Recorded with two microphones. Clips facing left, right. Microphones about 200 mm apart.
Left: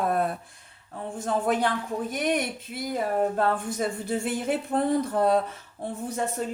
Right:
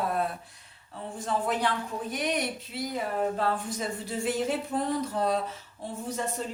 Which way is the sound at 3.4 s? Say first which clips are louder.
Left 4 dB; 55° left (ahead or behind).